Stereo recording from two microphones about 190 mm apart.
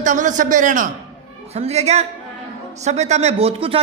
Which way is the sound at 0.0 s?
40° right (ahead or behind).